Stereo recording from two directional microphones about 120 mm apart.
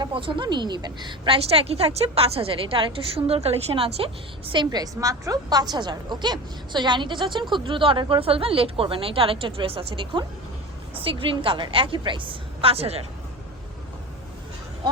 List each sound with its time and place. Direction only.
0.0 s a woman's voice: 45° right (ahead or behind)
1.5 s a woman's voice: 55° right (ahead or behind)